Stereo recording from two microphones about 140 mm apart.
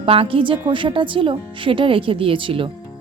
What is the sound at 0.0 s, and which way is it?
A woman's voice, 40° right (ahead or behind).